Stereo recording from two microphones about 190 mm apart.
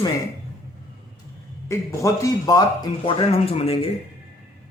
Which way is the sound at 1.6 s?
15° left (ahead or behind).